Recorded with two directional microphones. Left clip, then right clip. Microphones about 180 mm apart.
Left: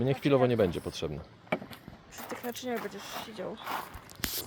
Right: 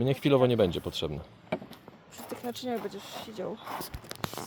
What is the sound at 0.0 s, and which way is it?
Speech, 20° right (ahead or behind).